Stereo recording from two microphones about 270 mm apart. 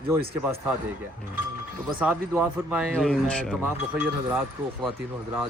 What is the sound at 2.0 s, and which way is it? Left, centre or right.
Speech, centre.